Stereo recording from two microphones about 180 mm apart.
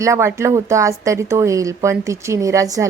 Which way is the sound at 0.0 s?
15° right (ahead or behind).